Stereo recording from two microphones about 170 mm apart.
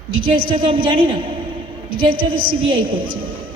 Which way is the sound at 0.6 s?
30° right (ahead or behind).